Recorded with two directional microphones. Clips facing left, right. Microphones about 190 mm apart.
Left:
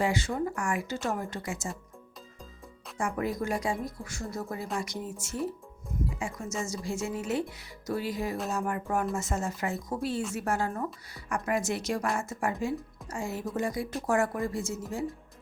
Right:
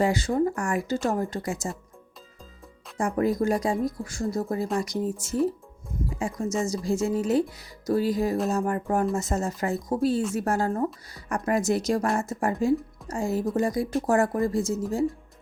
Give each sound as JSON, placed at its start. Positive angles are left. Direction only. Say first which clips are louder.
{"t": 0.0, "sound": "speech", "louder": "right 6 dB", "side_deg": -40}
{"t": 3.0, "sound": "speech", "louder": "right 7 dB", "side_deg": -40}